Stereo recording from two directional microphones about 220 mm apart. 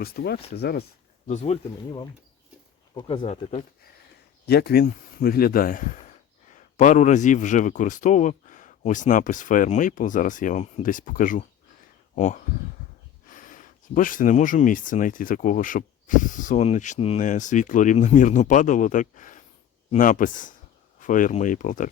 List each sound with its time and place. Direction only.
0.0 s speech: 45° left (ahead or behind)
1.3 s speech: 30° left (ahead or behind)
2.9 s speech: 20° left (ahead or behind)
4.4 s speech: 45° left (ahead or behind)